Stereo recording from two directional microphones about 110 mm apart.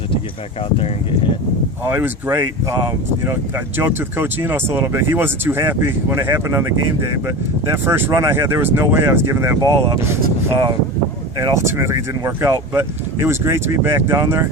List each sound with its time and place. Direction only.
1.8 s speech: 20° right (ahead or behind)
11.3 s speech: 30° right (ahead or behind)